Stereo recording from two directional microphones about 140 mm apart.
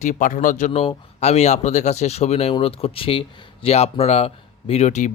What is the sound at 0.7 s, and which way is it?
Speech, 45° left (ahead or behind).